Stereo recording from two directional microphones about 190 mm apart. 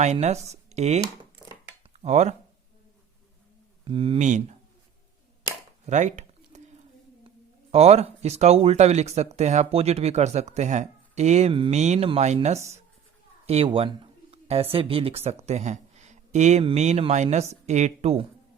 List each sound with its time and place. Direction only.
0.0 s speech: 35° right (ahead or behind)
3.8 s speech: 30° right (ahead or behind)
5.8 s a sound: 40° right (ahead or behind)
7.3 s speech: 35° right (ahead or behind)